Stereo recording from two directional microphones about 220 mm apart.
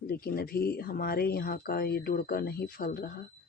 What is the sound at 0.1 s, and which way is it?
Speech, 45° left (ahead or behind).